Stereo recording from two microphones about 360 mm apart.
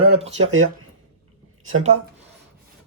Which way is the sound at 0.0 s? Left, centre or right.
Centre.